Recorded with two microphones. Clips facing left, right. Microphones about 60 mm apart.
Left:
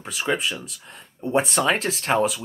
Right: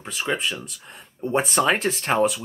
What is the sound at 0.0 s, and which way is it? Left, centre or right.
Speech, centre.